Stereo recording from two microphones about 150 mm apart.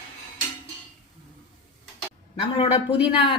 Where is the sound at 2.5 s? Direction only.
35° left (ahead or behind).